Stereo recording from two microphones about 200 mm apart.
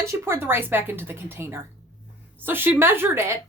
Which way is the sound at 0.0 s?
10° right (ahead or behind).